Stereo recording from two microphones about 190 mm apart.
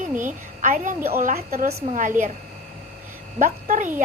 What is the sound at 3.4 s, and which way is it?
Speech, 45° right (ahead or behind).